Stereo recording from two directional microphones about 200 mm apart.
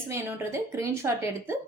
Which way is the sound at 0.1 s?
10° right (ahead or behind).